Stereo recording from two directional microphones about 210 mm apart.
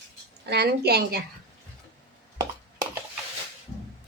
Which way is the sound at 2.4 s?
20° right (ahead or behind).